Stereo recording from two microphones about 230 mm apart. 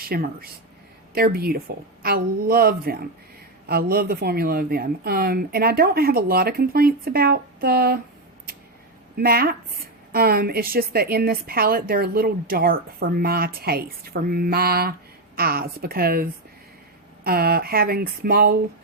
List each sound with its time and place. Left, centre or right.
0.0 s a woman's voice: right
9.1 s a woman's voice: right